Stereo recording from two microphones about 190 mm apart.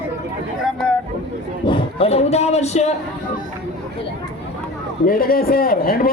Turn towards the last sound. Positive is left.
turn(degrees=50)  # may be behind; listen again after turning